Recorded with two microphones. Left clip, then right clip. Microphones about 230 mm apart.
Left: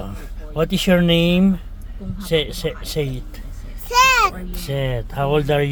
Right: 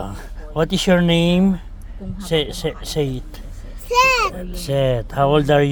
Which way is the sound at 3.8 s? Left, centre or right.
Centre.